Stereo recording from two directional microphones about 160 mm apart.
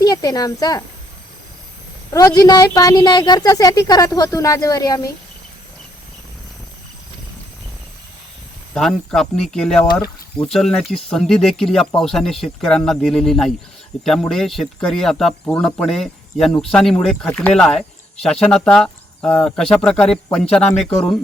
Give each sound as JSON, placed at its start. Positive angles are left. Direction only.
{"t": 0.0, "sound": "speech", "side_deg": 25}
{"t": 2.1, "sound": "a woman's voice", "side_deg": 25}
{"t": 8.7, "sound": "speech", "side_deg": 5}